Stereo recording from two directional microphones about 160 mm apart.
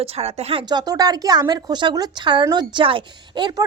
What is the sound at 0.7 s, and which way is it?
A woman's voice, 25° right (ahead or behind).